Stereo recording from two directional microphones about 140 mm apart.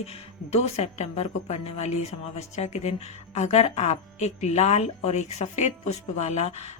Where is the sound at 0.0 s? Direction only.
50° left (ahead or behind).